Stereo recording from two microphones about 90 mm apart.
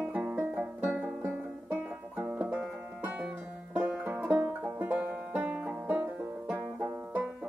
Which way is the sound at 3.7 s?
20° right (ahead or behind).